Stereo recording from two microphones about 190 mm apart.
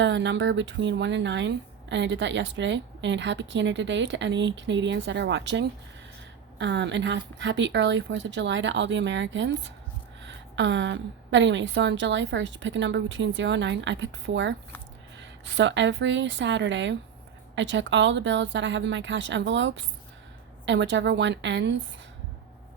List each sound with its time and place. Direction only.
0.0 s speech: 70° right (ahead or behind)